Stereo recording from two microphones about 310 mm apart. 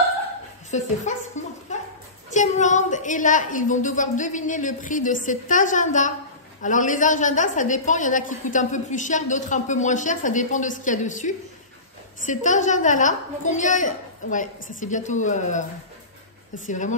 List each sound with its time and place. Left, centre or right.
0.7 s a woman's voice: left
16.6 s a woman's voice: left